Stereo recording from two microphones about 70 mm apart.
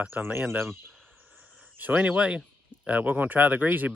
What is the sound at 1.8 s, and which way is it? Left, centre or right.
Speech, right.